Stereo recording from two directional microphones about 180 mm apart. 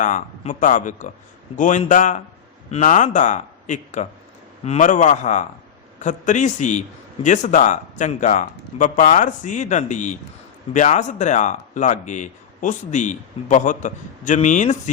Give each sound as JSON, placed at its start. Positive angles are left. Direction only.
{"t": 0.0, "sound": "a man's voice", "side_deg": 45}